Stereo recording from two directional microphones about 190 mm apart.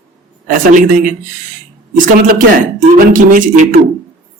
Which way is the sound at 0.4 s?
45° right (ahead or behind).